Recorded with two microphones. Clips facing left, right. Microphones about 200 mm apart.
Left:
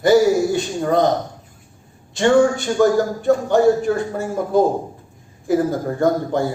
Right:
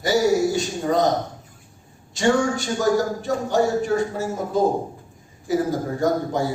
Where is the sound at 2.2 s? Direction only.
55° left (ahead or behind).